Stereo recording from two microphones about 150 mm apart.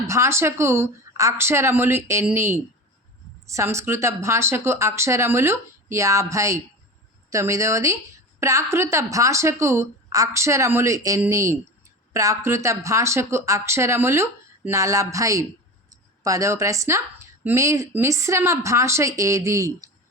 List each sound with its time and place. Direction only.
0.1 s speech: 20° right (ahead or behind)